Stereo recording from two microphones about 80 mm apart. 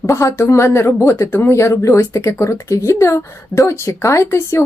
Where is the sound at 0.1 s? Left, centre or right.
Left.